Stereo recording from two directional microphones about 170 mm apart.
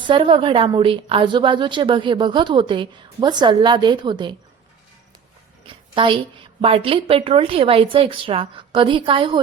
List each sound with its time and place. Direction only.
0.0 s a woman's voice: 30° right (ahead or behind)
5.6 s a woman's voice: 30° right (ahead or behind)